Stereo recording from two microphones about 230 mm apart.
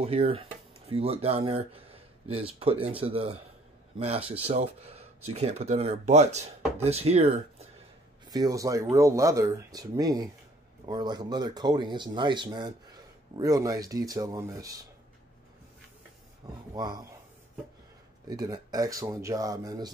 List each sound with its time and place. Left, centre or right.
0.0 s speech: right
4.4 s speech: right
8.3 s speech: centre
16.7 s speech: centre
18.3 s speech: centre